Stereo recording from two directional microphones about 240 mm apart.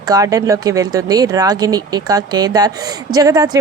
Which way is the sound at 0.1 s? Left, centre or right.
Centre.